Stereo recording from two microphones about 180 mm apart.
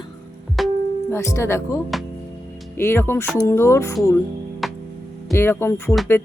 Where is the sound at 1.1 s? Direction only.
15° left (ahead or behind).